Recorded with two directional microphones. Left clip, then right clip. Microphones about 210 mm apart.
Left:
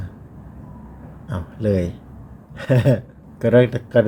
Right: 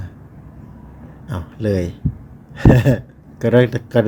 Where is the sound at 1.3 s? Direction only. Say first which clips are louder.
Right 1 dB; 10° right (ahead or behind).